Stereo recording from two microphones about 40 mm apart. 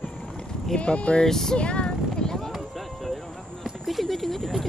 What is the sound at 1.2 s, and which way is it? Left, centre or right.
Speech, centre.